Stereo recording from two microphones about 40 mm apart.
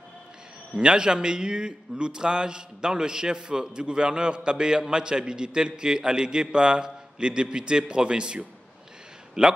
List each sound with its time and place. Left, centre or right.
0.7 s a man's voice: right